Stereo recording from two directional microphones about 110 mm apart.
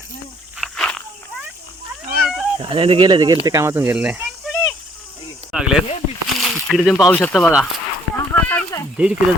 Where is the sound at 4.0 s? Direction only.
10° right (ahead or behind).